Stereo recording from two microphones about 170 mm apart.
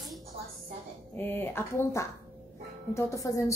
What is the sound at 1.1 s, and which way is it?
A woman's voice, 10° left (ahead or behind).